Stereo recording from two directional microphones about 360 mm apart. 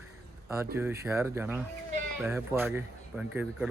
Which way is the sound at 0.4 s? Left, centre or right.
Centre.